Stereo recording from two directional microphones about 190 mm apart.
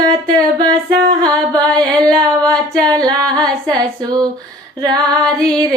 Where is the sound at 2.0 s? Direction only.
5° left (ahead or behind).